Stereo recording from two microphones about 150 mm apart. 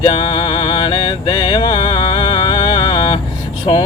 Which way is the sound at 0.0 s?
35° left (ahead or behind).